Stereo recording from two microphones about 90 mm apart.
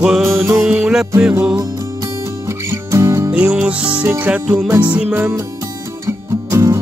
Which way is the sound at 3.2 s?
15° right (ahead or behind).